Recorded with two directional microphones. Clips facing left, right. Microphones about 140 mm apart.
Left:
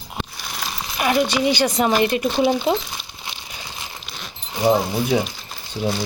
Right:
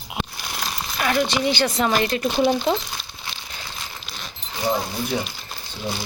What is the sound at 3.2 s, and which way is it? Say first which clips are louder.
Crumpling: left 1 dB; 15° left (ahead or behind).